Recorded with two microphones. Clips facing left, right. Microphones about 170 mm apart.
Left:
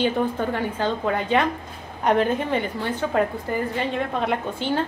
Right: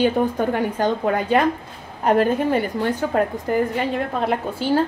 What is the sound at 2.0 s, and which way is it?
A woman's voice, 5° right (ahead or behind).